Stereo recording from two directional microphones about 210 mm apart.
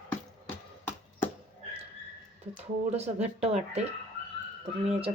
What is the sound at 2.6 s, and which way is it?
Speech, 30° right (ahead or behind).